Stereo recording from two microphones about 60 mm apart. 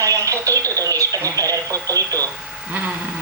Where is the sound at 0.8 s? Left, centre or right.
Right.